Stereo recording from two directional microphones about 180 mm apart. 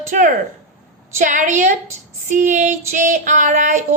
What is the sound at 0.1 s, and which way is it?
Child singing, 45° right (ahead or behind).